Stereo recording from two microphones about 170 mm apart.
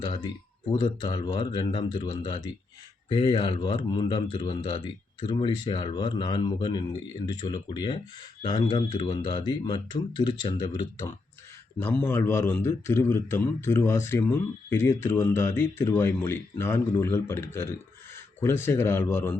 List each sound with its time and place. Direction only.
0.0 s speech: 25° left (ahead or behind)
11.8 s speech: 10° left (ahead or behind)